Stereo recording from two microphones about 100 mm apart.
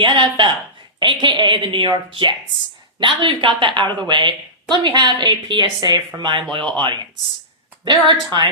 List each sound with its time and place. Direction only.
0.0 s a woman's voice: 55° right (ahead or behind)